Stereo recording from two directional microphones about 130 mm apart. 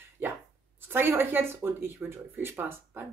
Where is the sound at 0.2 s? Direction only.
15° right (ahead or behind).